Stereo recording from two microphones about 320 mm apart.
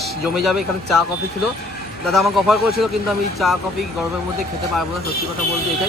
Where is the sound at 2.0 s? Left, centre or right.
Centre.